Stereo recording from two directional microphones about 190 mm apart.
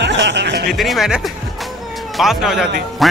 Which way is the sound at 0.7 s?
Centre (ahead or behind).